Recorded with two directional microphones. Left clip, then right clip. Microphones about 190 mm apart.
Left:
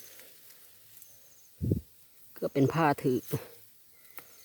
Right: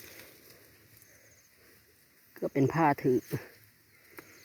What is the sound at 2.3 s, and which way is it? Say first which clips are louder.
Speech: left 1 dB; 30° left (ahead or behind).